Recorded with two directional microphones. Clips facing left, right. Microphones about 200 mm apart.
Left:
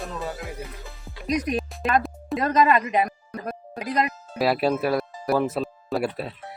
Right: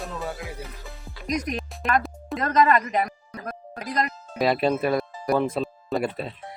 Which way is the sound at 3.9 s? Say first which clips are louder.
Left 2 dB; 5° left (ahead or behind).